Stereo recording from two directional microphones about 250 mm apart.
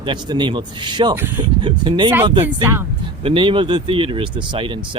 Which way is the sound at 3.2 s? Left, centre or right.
Right.